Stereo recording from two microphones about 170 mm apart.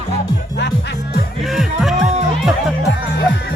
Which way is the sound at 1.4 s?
Centre (ahead or behind).